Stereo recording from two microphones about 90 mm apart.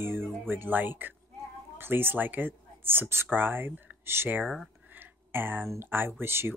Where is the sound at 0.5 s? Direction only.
20° right (ahead or behind).